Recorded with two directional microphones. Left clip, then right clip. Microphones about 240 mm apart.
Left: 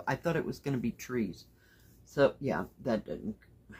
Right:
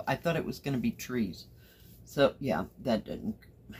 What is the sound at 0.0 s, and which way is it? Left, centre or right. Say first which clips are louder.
Speech: right 1 dB; centre.